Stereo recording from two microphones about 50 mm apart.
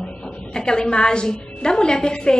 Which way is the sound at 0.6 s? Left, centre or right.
Centre.